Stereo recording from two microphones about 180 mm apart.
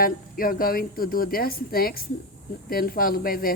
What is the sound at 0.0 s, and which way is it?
A woman's voice, 55° left (ahead or behind).